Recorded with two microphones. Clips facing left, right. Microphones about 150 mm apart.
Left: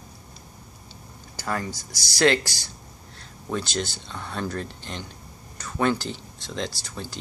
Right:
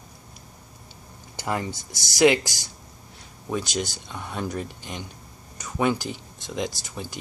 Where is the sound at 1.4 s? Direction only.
20° right (ahead or behind).